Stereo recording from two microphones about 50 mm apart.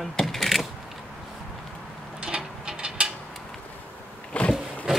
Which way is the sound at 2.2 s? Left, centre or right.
Centre.